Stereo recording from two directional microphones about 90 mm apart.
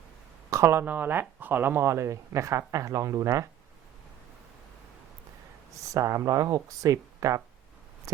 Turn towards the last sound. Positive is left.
turn(degrees=-40)  # may be behind; listen again after turning